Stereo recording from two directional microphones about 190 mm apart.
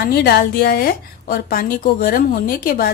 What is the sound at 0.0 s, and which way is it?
A woman's voice, 55° left (ahead or behind).